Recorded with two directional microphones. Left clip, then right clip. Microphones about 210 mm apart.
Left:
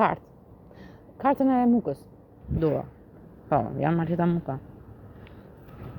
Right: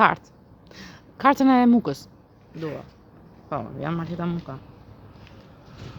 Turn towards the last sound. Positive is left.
turn(degrees=5)  # may be behind; listen again after turning